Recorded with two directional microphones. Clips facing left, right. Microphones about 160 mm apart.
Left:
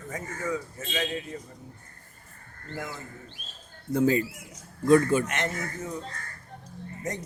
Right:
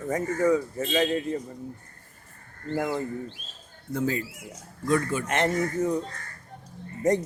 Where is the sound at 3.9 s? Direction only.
15° left (ahead or behind).